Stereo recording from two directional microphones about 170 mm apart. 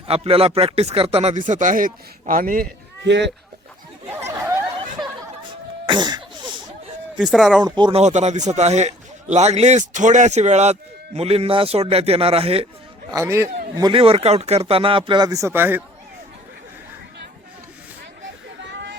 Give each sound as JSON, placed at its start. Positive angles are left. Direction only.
{"t": 0.1, "sound": "speech", "side_deg": -35}
{"t": 3.0, "sound": "speech", "side_deg": -90}
{"t": 5.8, "sound": "cough", "side_deg": -25}
{"t": 7.2, "sound": "speech", "side_deg": 0}
{"t": 7.6, "sound": "speech", "side_deg": -25}
{"t": 8.0, "sound": "speech", "side_deg": -45}
{"t": 13.1, "sound": "a man's voice", "side_deg": -15}
{"t": 13.7, "sound": "speech", "side_deg": -30}
{"t": 18.6, "sound": "a sound", "side_deg": -90}